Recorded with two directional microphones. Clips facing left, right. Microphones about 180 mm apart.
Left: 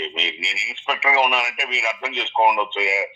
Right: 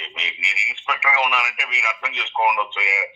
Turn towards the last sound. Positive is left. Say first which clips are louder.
# left 5 dB
turn(degrees=30)  # may be behind; listen again after turning